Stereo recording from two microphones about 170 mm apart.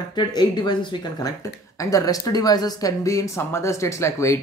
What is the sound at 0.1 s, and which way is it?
A man's voice, 25° left (ahead or behind).